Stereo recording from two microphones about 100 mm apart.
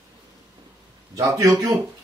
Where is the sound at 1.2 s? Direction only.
30° right (ahead or behind).